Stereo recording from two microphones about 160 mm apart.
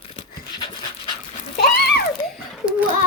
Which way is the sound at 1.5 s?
85° left.